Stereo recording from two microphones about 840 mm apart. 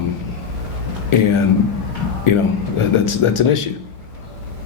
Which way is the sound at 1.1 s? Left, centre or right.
Left.